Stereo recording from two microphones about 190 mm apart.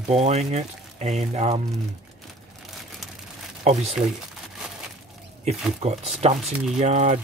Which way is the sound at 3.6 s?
35° right (ahead or behind).